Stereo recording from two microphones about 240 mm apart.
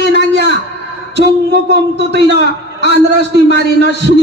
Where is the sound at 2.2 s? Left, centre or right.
Right.